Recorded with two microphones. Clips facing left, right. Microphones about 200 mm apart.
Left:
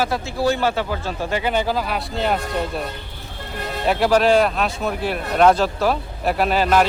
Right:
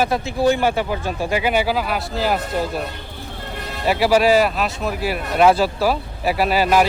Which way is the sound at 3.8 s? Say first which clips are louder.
Right 1 dB; 5° right (ahead or behind).